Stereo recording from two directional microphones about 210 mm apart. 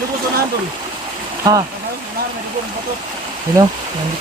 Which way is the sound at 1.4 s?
20° right (ahead or behind).